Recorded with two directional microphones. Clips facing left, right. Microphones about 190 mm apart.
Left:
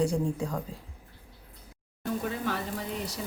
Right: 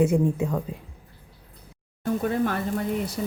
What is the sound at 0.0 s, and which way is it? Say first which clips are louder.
Speech: right 6 dB; 20° right (ahead or behind).